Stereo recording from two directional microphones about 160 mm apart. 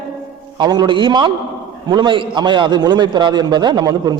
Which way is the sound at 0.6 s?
25° right (ahead or behind).